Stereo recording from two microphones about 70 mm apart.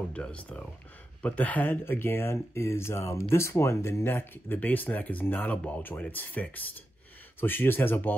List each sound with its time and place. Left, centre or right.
0.1 s speech: centre